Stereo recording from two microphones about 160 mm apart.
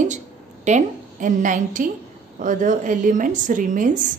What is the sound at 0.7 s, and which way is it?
A woman's voice, 50° right (ahead or behind).